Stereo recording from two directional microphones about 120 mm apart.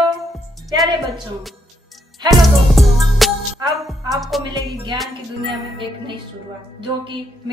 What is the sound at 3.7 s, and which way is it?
Speech, centre (ahead or behind).